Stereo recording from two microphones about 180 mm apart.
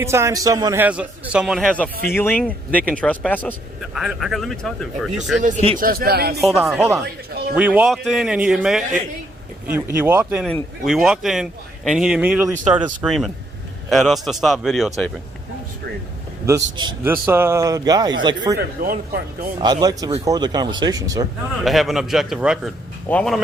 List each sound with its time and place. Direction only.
0.0 s a man's voice: 15° right (ahead or behind); by 5.1 s centre (ahead or behind)
5.4 s speech: 40° right (ahead or behind); by 6.4 s 60° right (ahead or behind)
7.5 s a man's voice: 10° right (ahead or behind)
16.5 s a man's voice: 20° right (ahead or behind)
18.5 s speech: 60° right (ahead or behind)
19.5 s a man's voice: 25° right (ahead or behind)
21.6 s speech: centre (ahead or behind)